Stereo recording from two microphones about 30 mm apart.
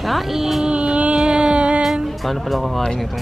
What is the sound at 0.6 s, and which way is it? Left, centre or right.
Music, right.